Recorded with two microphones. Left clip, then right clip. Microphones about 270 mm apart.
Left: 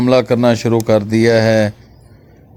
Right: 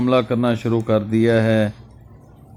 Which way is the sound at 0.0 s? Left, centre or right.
Left.